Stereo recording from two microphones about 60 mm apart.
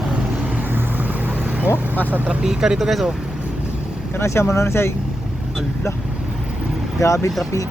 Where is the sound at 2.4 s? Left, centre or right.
Centre.